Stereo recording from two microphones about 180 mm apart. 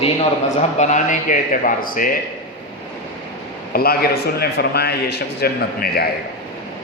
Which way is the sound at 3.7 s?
60° left (ahead or behind).